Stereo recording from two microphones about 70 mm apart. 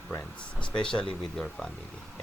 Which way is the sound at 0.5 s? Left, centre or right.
Centre.